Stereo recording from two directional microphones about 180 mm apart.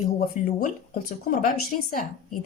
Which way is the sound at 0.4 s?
45° left (ahead or behind).